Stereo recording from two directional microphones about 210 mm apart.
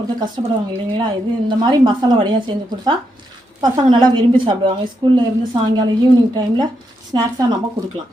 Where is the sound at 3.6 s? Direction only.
20° right (ahead or behind).